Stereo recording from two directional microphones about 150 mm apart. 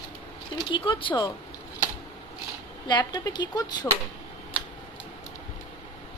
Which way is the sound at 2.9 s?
30° left (ahead or behind).